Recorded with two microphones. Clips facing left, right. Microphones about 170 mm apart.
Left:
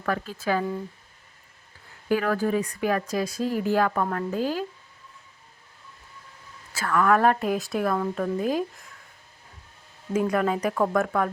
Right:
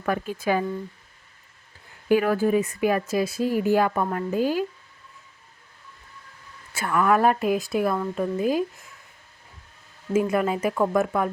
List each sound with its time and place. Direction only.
0.0 s speech: 15° right (ahead or behind)
2.0 s speech: 15° right (ahead or behind)
6.7 s speech: 15° right (ahead or behind)
10.1 s speech: 5° right (ahead or behind)